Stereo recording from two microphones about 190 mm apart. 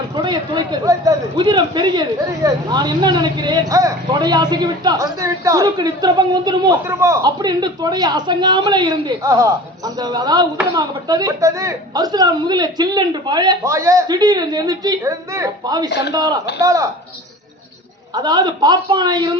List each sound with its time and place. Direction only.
0.2 s speech: 25° right (ahead or behind)
15.9 s a man's voice: 60° left (ahead or behind)
16.1 s speech: 20° right (ahead or behind)
18.1 s speech: 20° right (ahead or behind)